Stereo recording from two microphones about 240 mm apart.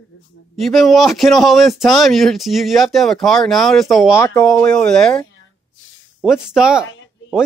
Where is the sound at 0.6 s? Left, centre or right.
Centre.